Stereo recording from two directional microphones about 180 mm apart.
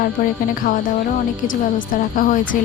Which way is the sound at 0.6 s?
50° left (ahead or behind).